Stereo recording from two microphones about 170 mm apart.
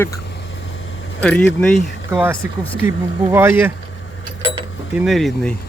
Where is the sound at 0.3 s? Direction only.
90° left.